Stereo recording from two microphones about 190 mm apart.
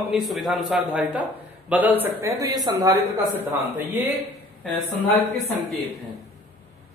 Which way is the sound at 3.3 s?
10° right (ahead or behind).